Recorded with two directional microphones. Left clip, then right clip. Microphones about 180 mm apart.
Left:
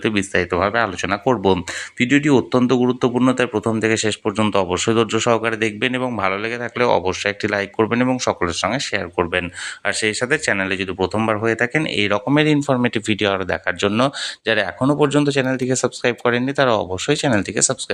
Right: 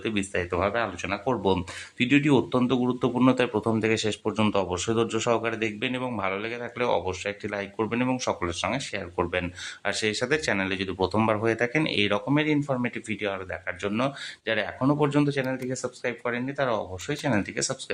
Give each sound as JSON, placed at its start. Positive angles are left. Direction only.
{"t": 0.0, "sound": "speech", "side_deg": 30}
{"t": 3.2, "sound": "speech", "side_deg": 15}
{"t": 12.3, "sound": "speech", "side_deg": 40}